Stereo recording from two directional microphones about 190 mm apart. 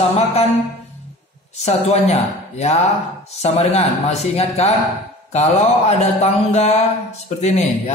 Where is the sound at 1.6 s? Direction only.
35° left (ahead or behind).